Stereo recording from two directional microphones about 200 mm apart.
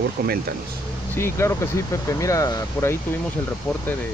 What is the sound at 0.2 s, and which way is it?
Speech, 50° right (ahead or behind).